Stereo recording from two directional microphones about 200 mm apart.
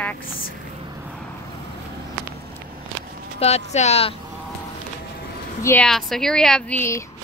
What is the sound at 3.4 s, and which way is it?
Speech, 35° left (ahead or behind).